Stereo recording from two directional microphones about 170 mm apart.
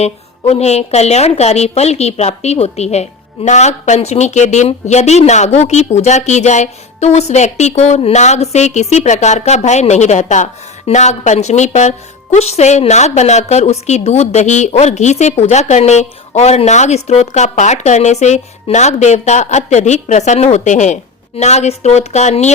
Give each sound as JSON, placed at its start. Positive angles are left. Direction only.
{"t": 0.0, "sound": "a woman's voice", "side_deg": 40}